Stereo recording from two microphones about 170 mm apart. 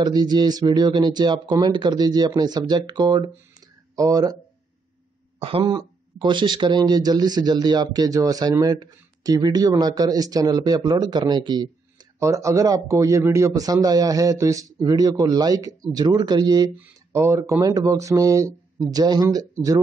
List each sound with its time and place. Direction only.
0.0 s speech: 25° right (ahead or behind)
5.4 s speech: 35° right (ahead or behind)
16.7 s speech: 15° right (ahead or behind)